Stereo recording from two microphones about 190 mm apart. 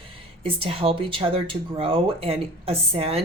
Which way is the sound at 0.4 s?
30° right (ahead or behind).